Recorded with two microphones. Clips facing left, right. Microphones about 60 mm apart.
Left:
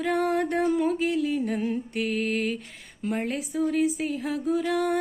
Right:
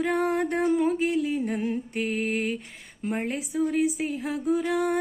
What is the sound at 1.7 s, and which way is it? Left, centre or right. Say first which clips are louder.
Music: even; right.